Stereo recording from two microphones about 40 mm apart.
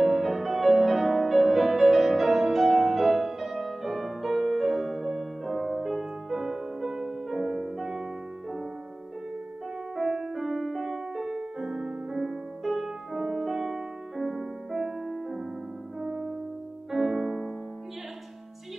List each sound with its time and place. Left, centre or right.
0.0 s music: centre
7.7 s music: centre
9.9 s music: centre
16.0 s music: centre